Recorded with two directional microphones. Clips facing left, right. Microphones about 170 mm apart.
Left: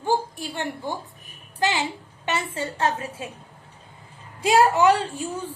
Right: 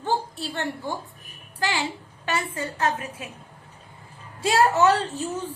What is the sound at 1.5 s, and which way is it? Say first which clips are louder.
A woman's voice: left 3 dB; 20° left (ahead or behind).